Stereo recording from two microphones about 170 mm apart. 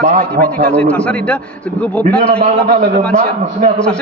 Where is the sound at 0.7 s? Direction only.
5° left (ahead or behind).